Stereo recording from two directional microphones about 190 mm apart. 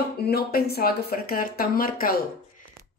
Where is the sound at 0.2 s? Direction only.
55° left (ahead or behind).